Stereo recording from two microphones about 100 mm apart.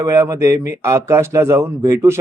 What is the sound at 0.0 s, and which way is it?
A man's voice, 30° right (ahead or behind).